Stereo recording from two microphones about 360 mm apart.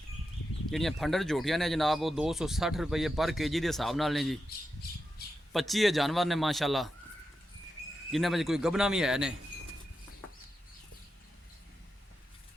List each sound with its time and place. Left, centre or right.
0.7 s speech: centre
5.5 s speech: centre
8.1 s speech: centre